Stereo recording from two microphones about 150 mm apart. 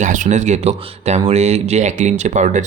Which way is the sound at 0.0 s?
55° right (ahead or behind).